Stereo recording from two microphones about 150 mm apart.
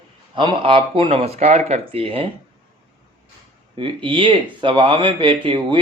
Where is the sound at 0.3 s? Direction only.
35° right (ahead or behind).